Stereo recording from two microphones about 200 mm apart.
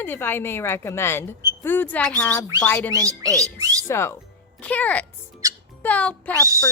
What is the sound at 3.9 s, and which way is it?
A woman's voice, 15° left (ahead or behind).